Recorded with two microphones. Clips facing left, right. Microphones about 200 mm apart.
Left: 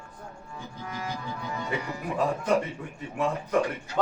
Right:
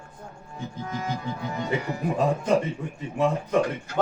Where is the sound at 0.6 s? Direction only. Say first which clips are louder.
Right 6 dB; 20° right (ahead or behind).